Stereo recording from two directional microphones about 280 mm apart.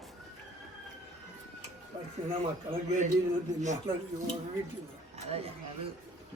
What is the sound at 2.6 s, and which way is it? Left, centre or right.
Speech, right.